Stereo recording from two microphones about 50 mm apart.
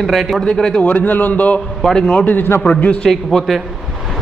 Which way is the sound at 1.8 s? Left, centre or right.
Centre.